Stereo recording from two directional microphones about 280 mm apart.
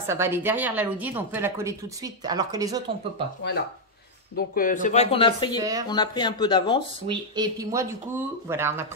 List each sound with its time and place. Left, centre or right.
0.0 s a woman's voice: centre
4.4 s speech: left
5.6 s a woman's voice: centre
5.9 s speech: centre
7.1 s a woman's voice: centre